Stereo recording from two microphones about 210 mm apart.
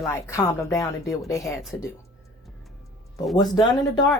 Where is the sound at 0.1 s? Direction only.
15° left (ahead or behind).